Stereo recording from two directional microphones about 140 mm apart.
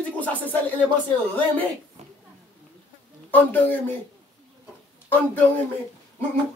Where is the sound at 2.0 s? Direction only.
50° right (ahead or behind).